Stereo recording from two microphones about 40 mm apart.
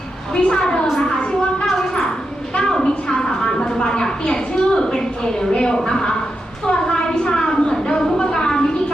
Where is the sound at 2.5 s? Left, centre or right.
Left.